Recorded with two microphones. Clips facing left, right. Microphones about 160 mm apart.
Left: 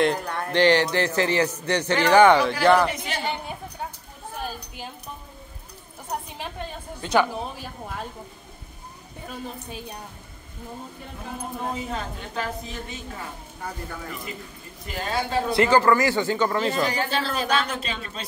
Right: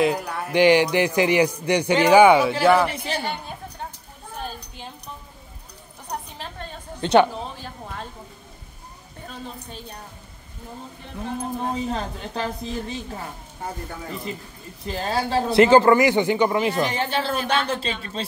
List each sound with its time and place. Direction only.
0.0 s a man's voice: 5° right (ahead or behind)
2.9 s a woman's voice: 30° right (ahead or behind)
3.2 s chatter: 15° left (ahead or behind)
7.0 s a woman's voice: 25° right (ahead or behind)
7.6 s speech: 5° left (ahead or behind)
11.7 s a woman's voice: 30° right (ahead or behind)
15.0 s speech: 35° right (ahead or behind)